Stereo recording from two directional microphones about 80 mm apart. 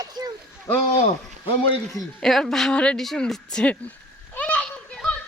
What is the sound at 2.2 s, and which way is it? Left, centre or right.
Speech, centre.